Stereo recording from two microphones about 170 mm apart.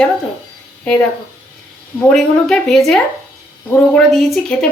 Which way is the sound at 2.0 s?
5° left (ahead or behind).